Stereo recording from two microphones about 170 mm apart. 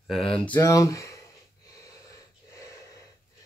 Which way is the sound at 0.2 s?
35° left (ahead or behind).